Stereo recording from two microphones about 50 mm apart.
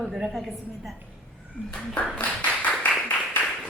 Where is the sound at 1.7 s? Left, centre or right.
Centre.